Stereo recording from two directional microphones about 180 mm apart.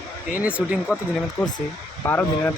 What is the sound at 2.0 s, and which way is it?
Speech, 15° left (ahead or behind).